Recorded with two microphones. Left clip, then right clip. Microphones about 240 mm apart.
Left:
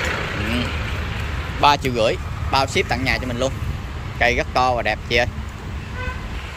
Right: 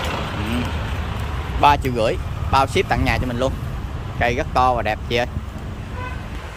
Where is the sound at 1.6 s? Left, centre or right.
Centre.